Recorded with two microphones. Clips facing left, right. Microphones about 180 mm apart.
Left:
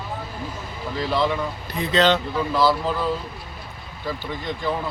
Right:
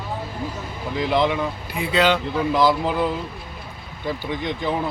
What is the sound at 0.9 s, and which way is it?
Speech, 20° right (ahead or behind).